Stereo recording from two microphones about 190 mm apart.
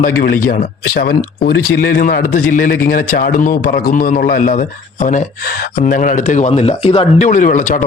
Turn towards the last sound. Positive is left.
turn(degrees=45)  # may be behind; listen again after turning